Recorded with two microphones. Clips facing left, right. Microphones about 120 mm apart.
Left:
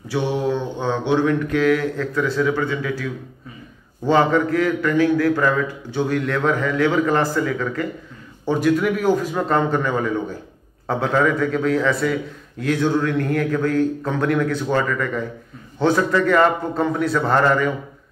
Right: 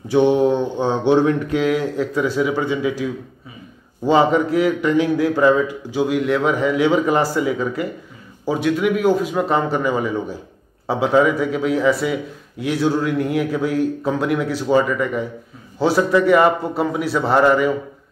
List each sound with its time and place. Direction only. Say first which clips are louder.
0.1 s mantra: right 7 dB; 20° right (ahead or behind)
1.5 s a man's voice: even; 20° right (ahead or behind)
8.5 s a man's voice: even; centre (ahead or behind)